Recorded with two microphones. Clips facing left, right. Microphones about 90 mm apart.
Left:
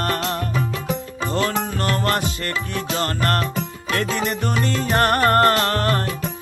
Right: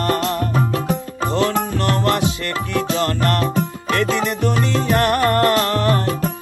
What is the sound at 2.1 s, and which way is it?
Music, 45° left (ahead or behind).